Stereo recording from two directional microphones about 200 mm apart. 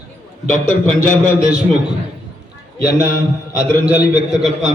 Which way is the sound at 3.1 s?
50° left (ahead or behind).